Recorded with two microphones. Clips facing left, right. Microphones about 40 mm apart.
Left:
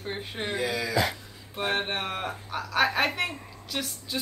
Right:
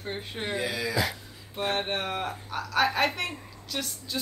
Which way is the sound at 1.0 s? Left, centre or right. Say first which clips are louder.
Left 2 dB; centre.